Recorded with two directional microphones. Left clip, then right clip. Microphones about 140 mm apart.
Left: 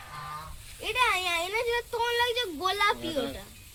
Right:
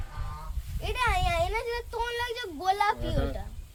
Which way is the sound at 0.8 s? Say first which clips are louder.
Left 2 dB; 90° right.